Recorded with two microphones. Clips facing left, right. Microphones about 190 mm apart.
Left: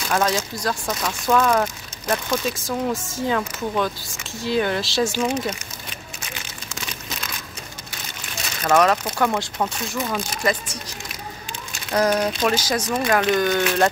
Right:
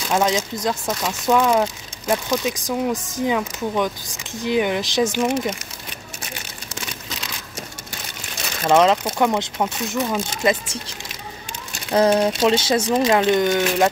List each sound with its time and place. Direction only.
0.1 s speech: 20° right (ahead or behind)
8.6 s speech: 20° right (ahead or behind)
11.9 s speech: 25° right (ahead or behind)